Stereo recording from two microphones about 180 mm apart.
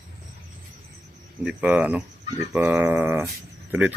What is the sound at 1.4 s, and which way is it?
Speech, 5° right (ahead or behind).